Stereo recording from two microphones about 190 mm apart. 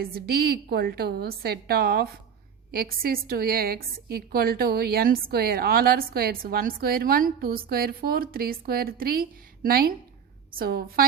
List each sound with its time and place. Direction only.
0.0 s a woman's voice: 55° right (ahead or behind)